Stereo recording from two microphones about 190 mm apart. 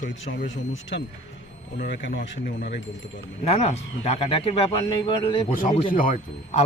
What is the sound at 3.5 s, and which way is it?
Speech, 35° left (ahead or behind).